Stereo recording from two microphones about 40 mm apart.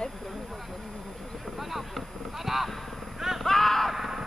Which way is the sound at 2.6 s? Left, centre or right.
Centre.